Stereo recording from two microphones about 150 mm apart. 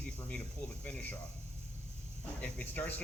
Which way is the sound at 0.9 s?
10° left (ahead or behind).